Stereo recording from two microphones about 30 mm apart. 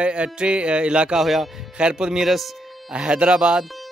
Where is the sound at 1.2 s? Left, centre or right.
Centre.